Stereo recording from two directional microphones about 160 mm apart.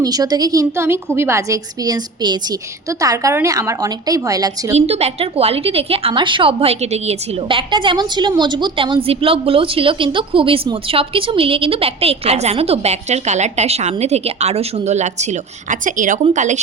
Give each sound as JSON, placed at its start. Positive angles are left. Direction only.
{"t": 0.0, "sound": "a woman's voice", "side_deg": -25}
{"t": 4.7, "sound": "a woman's voice", "side_deg": -40}